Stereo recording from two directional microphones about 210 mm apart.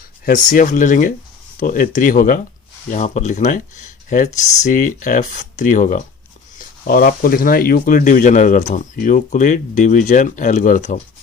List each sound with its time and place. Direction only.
0.3 s speech: 40° left (ahead or behind)